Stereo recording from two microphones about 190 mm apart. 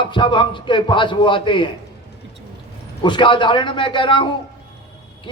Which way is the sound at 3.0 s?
25° left (ahead or behind).